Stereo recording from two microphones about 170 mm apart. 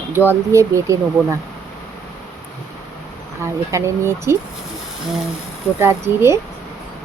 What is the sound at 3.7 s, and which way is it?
Speech, 15° right (ahead or behind).